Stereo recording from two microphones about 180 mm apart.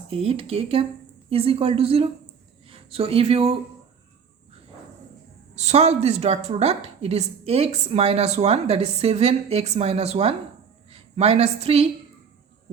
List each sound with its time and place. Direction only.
0.1 s a woman's voice: 30° right (ahead or behind)
5.5 s a woman's voice: 35° right (ahead or behind)